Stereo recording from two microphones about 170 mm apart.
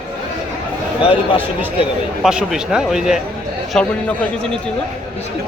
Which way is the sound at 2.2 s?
5° right (ahead or behind).